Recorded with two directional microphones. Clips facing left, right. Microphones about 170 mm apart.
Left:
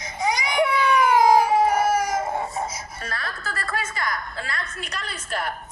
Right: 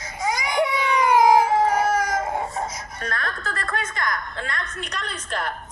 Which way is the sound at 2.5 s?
5° left (ahead or behind).